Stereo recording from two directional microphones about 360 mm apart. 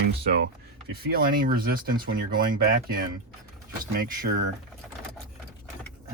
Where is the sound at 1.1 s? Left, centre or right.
Right.